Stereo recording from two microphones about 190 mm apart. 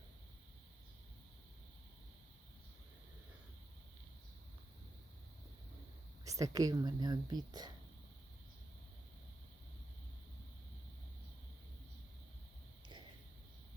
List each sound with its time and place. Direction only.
6.2 s a woman's voice: 15° right (ahead or behind)